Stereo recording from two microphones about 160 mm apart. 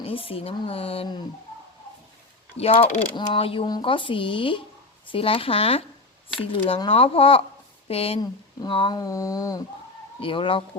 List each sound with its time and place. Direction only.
0.0 s speech: 35° left (ahead or behind)
2.6 s speech: 40° left (ahead or behind); by 9.6 s 20° left (ahead or behind)
10.2 s speech: 35° left (ahead or behind)